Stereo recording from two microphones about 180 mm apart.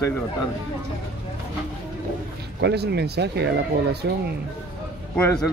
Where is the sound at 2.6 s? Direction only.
65° right (ahead or behind).